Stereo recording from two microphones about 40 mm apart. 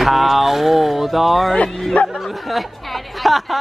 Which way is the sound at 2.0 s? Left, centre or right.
Left.